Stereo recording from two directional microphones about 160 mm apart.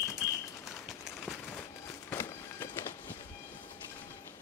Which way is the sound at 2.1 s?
15° left (ahead or behind).